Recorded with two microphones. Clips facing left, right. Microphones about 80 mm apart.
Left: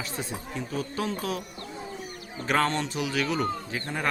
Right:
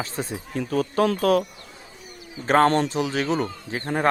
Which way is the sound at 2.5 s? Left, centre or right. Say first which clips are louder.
Right 8 dB; right.